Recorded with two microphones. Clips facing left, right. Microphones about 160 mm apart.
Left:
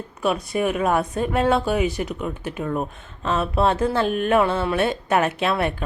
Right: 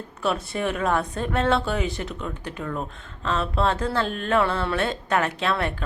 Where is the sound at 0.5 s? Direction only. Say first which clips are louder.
Left 5 dB; 10° left (ahead or behind).